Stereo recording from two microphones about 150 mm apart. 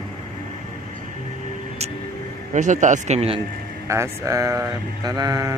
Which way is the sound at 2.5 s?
55° right (ahead or behind).